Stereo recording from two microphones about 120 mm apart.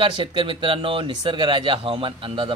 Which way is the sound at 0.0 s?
45° right (ahead or behind).